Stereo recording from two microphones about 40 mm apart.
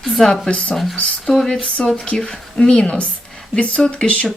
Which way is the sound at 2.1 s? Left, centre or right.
Centre.